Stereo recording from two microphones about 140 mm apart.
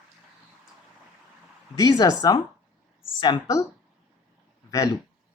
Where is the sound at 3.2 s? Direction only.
35° left (ahead or behind).